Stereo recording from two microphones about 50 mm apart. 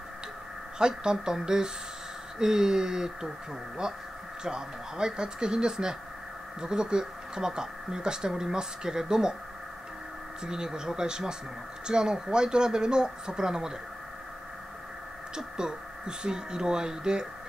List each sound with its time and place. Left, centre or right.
0.7 s speech: centre
4.4 s speech: centre
10.4 s speech: centre
15.3 s speech: centre